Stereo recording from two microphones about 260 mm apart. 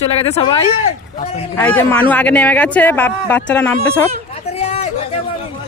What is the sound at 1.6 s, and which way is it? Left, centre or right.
A man's voice, centre.